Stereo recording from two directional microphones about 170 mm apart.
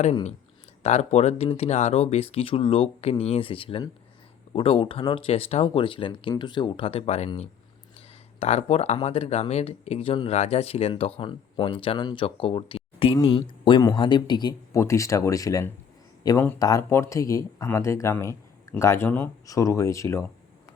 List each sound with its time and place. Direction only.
0.0 s speech: 40° left (ahead or behind); by 20.3 s 15° left (ahead or behind)